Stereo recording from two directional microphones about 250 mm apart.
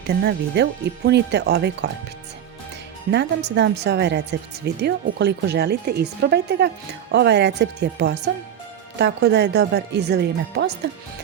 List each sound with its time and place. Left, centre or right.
0.1 s speech: right
3.1 s speech: right